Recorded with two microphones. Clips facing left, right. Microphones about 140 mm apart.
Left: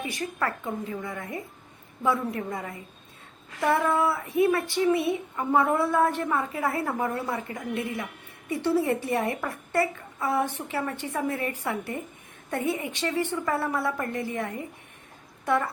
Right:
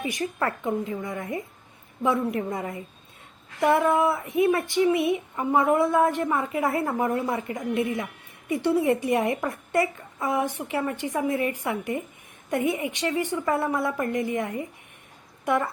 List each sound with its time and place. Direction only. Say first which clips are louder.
0.1 s a woman's voice: right 2 dB; 25° right (ahead or behind)